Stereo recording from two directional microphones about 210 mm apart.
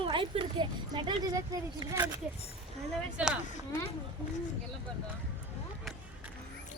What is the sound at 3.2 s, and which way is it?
Speech, 5° right (ahead or behind).